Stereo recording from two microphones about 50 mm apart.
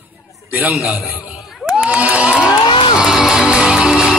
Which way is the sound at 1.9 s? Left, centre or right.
Right.